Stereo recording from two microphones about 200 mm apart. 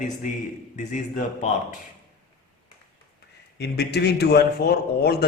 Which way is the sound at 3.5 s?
55° left (ahead or behind).